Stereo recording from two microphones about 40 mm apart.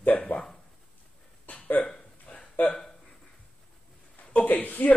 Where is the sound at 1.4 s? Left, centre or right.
Left.